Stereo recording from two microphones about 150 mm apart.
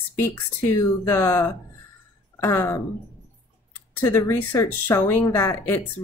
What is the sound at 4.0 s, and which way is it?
Speech, 15° left (ahead or behind).